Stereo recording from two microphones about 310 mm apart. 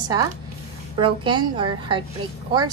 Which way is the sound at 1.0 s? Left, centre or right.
Centre.